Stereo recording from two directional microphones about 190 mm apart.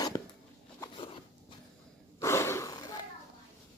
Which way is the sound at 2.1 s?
15° left (ahead or behind).